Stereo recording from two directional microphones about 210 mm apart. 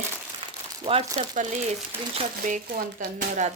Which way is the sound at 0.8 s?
25° right (ahead or behind).